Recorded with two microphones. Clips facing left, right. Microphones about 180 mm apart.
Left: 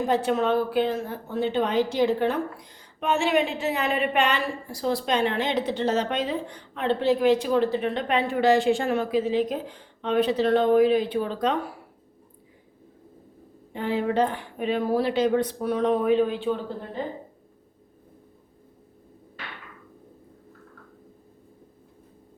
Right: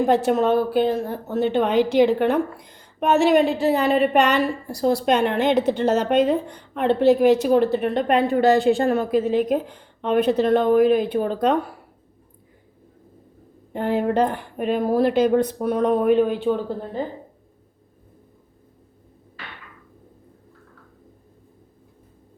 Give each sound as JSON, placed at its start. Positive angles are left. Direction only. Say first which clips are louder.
{"t": 0.0, "sound": "a woman's voice", "louder": "right 5 dB", "side_deg": -50}
{"t": 13.7, "sound": "a woman's voice", "louder": "right 4 dB", "side_deg": -50}